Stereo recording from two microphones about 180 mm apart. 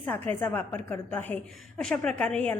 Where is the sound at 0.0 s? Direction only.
10° left (ahead or behind).